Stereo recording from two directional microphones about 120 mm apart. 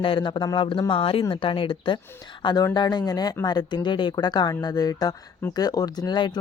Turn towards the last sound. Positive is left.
turn(degrees=35)  # may be behind; listen again after turning